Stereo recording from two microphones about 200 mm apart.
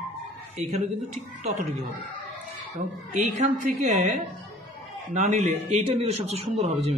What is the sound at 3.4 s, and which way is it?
A man's voice, 35° right (ahead or behind).